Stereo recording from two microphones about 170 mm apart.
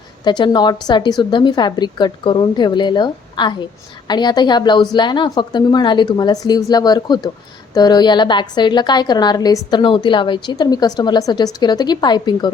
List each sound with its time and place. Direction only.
0.3 s a woman's voice: 25° left (ahead or behind)